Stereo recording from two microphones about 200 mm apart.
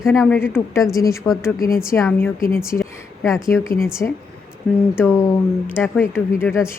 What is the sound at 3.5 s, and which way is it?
Speech, 10° left (ahead or behind).